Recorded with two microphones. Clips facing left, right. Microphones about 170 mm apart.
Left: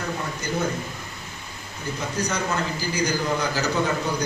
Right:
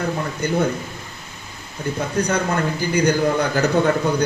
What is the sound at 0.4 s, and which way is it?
Speech, 60° right (ahead or behind).